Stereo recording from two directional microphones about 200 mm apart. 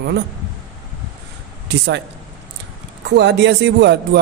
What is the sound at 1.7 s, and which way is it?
Speech, 60° right (ahead or behind).